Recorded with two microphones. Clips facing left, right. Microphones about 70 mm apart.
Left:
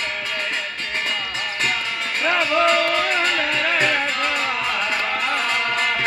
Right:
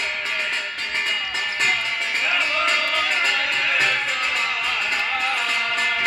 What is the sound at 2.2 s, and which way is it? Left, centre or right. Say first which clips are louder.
Music: left 6 dB; left.